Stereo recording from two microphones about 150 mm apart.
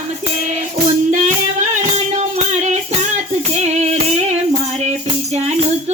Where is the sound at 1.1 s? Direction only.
55° right (ahead or behind).